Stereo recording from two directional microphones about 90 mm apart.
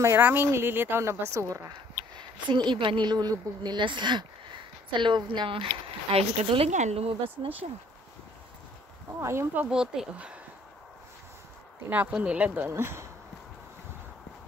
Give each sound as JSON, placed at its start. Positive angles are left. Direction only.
{"t": 0.0, "sound": "speech", "side_deg": -25}
{"t": 2.1, "sound": "a woman's voice", "side_deg": -60}
{"t": 6.1, "sound": "speech", "side_deg": -90}
{"t": 9.2, "sound": "speech", "side_deg": -30}
{"t": 9.6, "sound": "speech", "side_deg": -10}
{"t": 11.9, "sound": "speech", "side_deg": -15}